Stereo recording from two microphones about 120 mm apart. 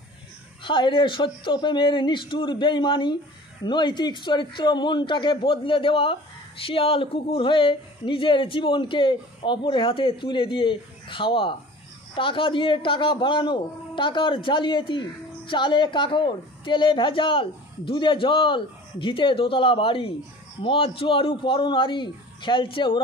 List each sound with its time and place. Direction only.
0.7 s a man's voice: 40° left (ahead or behind)